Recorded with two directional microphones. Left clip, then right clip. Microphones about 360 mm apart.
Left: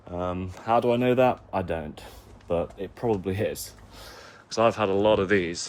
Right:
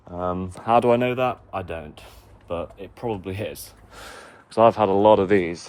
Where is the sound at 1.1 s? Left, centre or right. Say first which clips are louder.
Left 2 dB; centre.